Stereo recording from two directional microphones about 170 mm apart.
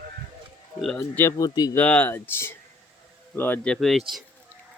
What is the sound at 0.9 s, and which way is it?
Speech, 15° left (ahead or behind).